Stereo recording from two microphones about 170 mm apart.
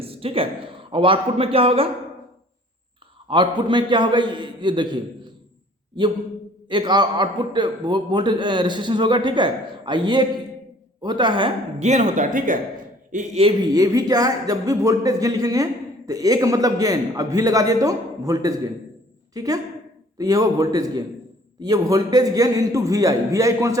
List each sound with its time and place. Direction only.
0.0 s a man's voice: 35° right (ahead or behind)
3.2 s speech: 30° right (ahead or behind)
6.0 s speech: 25° right (ahead or behind)
11.8 s speech: 45° right (ahead or behind)
13.6 s a woman's voice: 20° right (ahead or behind)